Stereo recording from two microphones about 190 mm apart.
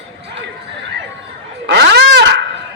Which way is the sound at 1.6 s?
65° right (ahead or behind).